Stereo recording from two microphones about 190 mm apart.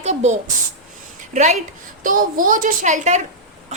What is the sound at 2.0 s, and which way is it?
A woman's voice, 45° right (ahead or behind).